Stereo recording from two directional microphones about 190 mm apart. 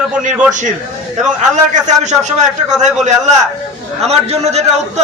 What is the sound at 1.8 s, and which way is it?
Speech, 40° right (ahead or behind).